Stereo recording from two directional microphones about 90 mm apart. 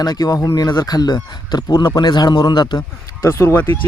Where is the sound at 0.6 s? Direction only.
50° left (ahead or behind).